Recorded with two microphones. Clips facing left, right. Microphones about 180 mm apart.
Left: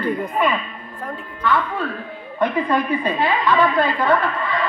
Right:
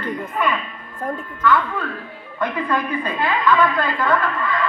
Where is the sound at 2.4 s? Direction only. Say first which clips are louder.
Left 3 dB; 25° left (ahead or behind).